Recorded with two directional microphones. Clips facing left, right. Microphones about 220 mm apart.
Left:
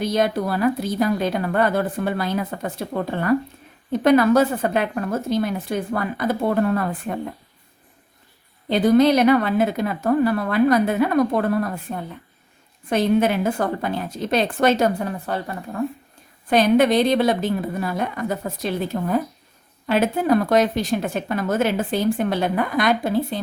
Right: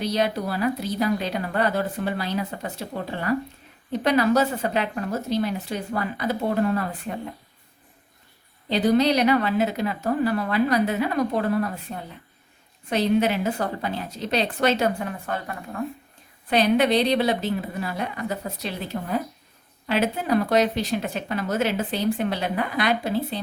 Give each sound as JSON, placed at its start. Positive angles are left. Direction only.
{"t": 0.0, "sound": "speech", "side_deg": 50}
{"t": 8.7, "sound": "speech", "side_deg": 50}
{"t": 16.5, "sound": "speech", "side_deg": 45}